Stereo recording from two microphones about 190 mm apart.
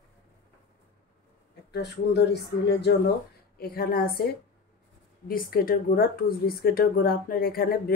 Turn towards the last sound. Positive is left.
turn(degrees=50)  # may be behind; listen again after turning